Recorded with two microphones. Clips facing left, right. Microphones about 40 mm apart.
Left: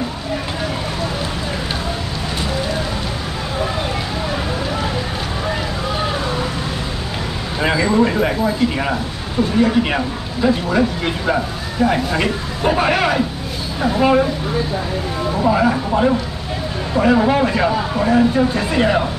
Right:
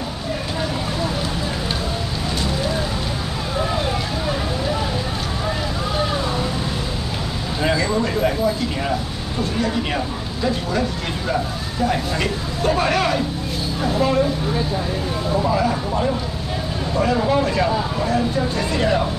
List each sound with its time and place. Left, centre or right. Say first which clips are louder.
7.6 s speech: left 5 dB; left
15.5 s speech: left 4 dB; left